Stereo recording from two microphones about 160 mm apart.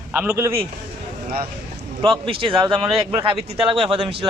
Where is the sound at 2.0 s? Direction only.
35° right (ahead or behind).